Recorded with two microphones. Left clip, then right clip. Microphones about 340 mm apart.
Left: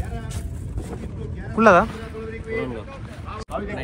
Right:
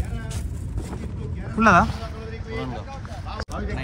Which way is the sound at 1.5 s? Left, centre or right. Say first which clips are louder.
Left 2 dB; centre.